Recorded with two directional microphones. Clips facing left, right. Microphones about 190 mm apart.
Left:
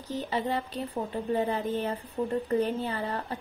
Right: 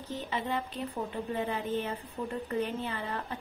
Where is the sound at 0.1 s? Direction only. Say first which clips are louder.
Left 4 dB; 35° left (ahead or behind).